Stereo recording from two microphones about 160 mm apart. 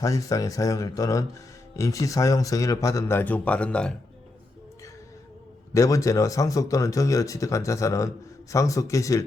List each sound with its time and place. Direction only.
0.0 s speech: 20° left (ahead or behind)
5.7 s speech: 20° left (ahead or behind)